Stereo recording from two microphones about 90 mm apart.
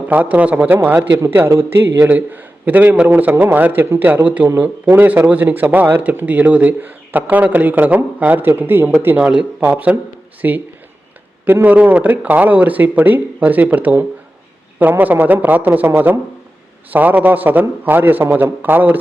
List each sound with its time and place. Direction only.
0.1 s speech: 15° right (ahead or behind)
16.9 s speech: 20° right (ahead or behind)